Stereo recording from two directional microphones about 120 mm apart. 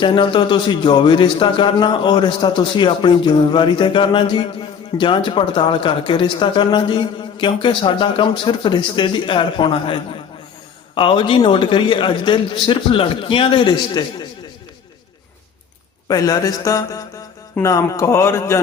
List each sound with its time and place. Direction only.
0.0 s a man's voice: 45° left (ahead or behind)
16.0 s a man's voice: 30° left (ahead or behind)